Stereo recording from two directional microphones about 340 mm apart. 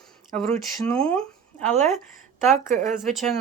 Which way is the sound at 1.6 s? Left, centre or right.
Centre.